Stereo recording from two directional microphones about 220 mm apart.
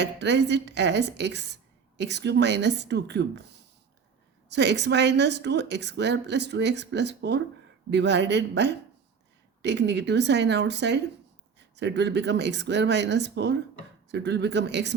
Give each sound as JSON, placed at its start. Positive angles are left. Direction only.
{"t": 0.0, "sound": "speech", "side_deg": -50}
{"t": 4.4, "sound": "speech", "side_deg": -50}